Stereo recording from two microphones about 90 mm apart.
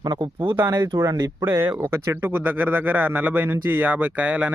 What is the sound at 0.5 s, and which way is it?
Speech, 30° right (ahead or behind).